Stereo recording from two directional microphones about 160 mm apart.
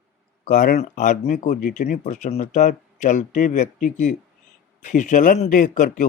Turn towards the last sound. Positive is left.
turn(degrees=55)  # may be behind; listen again after turning